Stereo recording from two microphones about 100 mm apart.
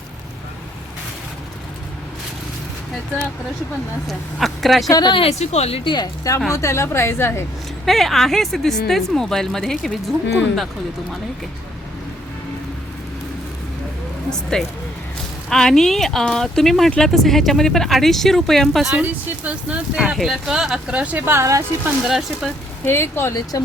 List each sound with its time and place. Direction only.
4.0 s speech: centre (ahead or behind)
4.9 s speech: 45° left (ahead or behind)
5.1 s speech: 80° left
6.5 s a woman's voice: 30° left (ahead or behind)
7.9 s speech: centre (ahead or behind)
14.5 s speech: 5° left (ahead or behind)
18.9 s speech: 15° right (ahead or behind)
22.0 s speech: 5° right (ahead or behind)
22.9 s a woman's voice: 25° left (ahead or behind)